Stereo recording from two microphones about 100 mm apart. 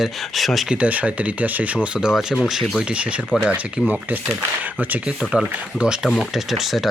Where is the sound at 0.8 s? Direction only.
15° right (ahead or behind).